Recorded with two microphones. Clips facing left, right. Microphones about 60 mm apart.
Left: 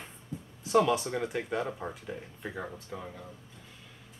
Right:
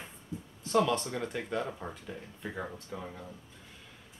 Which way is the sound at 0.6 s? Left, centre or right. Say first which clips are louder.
Left 3 dB; centre.